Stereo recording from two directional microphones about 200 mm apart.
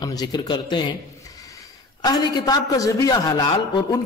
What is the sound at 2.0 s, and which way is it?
A man's voice, 20° left (ahead or behind).